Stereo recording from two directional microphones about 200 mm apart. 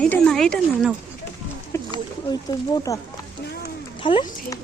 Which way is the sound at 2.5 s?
15° left (ahead or behind).